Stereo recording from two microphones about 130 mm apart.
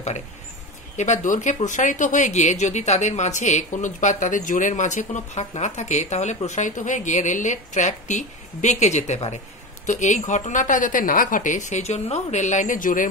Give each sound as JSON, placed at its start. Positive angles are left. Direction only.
{"t": 0.9, "sound": "speech", "side_deg": 65}